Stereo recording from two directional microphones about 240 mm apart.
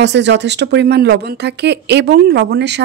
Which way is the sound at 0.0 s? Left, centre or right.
Right.